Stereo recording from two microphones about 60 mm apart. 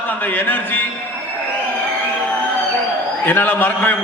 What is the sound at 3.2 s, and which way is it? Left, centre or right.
Speech, left.